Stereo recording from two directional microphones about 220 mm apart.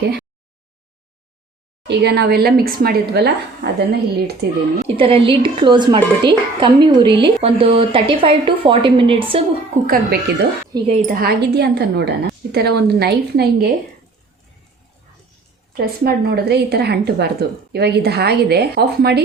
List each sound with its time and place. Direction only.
1.9 s a woman's voice: 50° right (ahead or behind)
4.9 s a woman's voice: 25° right (ahead or behind)
9.8 s a woman's voice: 40° right (ahead or behind)
15.7 s a woman's voice: 45° right (ahead or behind)